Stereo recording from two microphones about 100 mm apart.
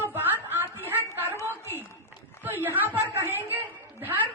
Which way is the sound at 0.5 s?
20° right (ahead or behind).